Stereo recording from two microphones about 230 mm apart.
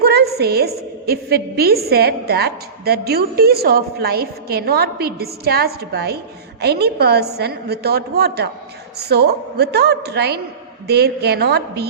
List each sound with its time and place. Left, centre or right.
0.0 s a woman's voice: right